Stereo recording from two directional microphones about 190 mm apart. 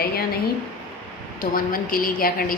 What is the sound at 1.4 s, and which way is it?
A woman's voice, 50° left (ahead or behind).